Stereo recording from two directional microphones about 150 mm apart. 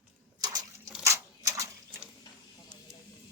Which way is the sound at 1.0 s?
20° right (ahead or behind).